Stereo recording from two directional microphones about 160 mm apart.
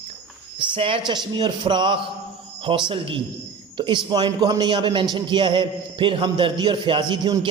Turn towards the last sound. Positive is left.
turn(degrees=-25)  # may be behind; listen again after turning